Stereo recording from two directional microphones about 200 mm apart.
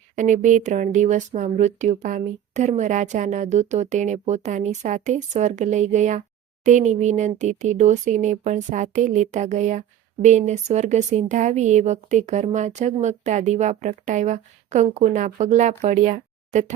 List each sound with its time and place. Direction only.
0.2 s speech: 40° right (ahead or behind)